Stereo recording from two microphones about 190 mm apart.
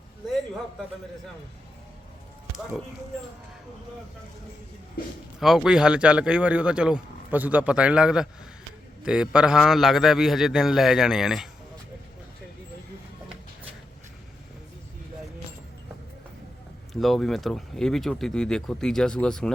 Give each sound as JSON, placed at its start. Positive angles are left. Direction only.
{"t": 5.4, "sound": "speech", "side_deg": 0}
{"t": 16.9, "sound": "speech", "side_deg": 0}